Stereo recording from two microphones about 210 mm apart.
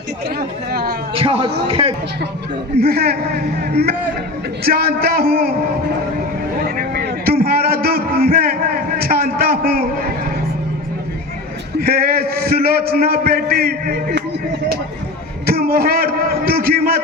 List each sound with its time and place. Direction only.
0.3 s a man's voice: 45° right (ahead or behind)
1.1 s a man's voice: 25° right (ahead or behind)
2.7 s a man's voice: 45° right (ahead or behind)
6.6 s a sound: 45° right (ahead or behind)
11.8 s a man's voice: 45° right (ahead or behind)
15.4 s a man's voice: 45° right (ahead or behind)